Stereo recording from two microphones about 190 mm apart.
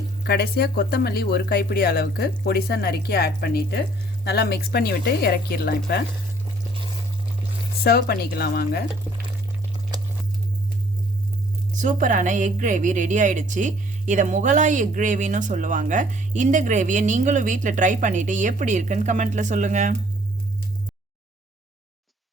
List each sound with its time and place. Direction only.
0.3 s speech: 55° left (ahead or behind)
7.9 s speech: 55° left (ahead or behind)
11.8 s speech: 45° right (ahead or behind)